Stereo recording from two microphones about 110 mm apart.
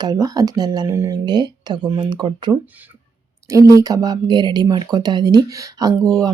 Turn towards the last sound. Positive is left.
turn(degrees=-30)  # may be behind; listen again after turning